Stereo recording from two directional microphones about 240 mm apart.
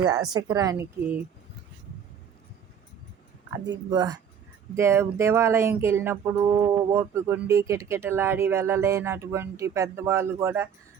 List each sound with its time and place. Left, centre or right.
0.0 s speech: centre
3.9 s speech: centre